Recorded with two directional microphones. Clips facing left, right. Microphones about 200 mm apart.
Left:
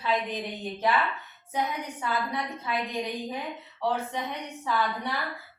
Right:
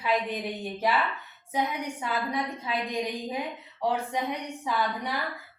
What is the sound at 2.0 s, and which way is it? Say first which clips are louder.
Speech: even; 15° right (ahead or behind).